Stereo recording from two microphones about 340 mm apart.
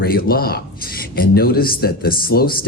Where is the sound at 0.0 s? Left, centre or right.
Left.